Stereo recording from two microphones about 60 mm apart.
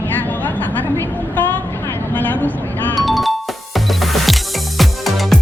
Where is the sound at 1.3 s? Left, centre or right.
Left.